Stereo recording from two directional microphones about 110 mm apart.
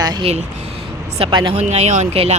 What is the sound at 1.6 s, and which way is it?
Speech, 85° right.